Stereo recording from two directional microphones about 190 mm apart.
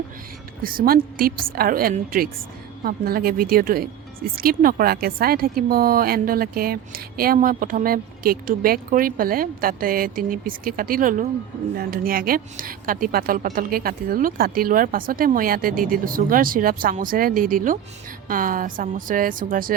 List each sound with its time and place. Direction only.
0.6 s speech: 50° right (ahead or behind)